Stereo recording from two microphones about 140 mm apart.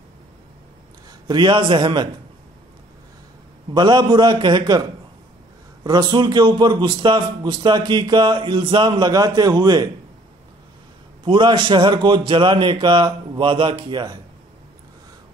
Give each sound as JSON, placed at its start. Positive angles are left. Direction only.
{"t": 1.2, "sound": "a man's voice", "side_deg": -30}
{"t": 3.7, "sound": "a man's voice", "side_deg": -30}
{"t": 5.9, "sound": "a man's voice", "side_deg": -30}
{"t": 11.2, "sound": "a man's voice", "side_deg": -35}